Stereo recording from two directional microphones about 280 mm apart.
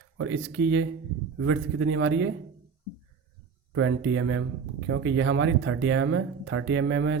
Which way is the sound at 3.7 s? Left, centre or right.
Right.